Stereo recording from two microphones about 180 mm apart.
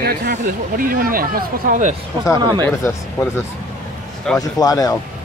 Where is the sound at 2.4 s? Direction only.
25° right (ahead or behind).